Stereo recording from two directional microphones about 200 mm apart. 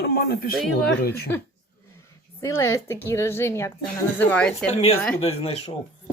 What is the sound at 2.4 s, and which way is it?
A woman's voice, 15° left (ahead or behind).